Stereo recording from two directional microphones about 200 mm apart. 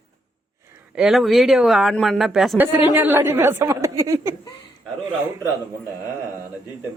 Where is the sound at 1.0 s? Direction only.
Centre (ahead or behind).